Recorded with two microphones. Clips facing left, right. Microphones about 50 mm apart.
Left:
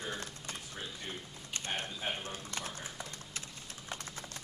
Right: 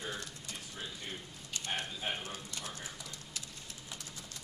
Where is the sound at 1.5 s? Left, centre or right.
Left.